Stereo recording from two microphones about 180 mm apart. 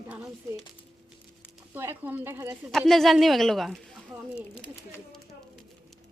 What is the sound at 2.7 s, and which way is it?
A woman's voice, centre (ahead or behind).